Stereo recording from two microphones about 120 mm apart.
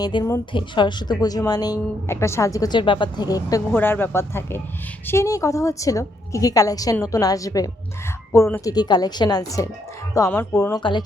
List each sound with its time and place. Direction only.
0.0 s a woman's voice: 40° left (ahead or behind)
2.0 s a woman's voice: 20° left (ahead or behind)
3.8 s a woman's voice: 15° left (ahead or behind)
8.7 s a woman's voice: 35° left (ahead or behind)
10.8 s a woman's voice: 40° left (ahead or behind)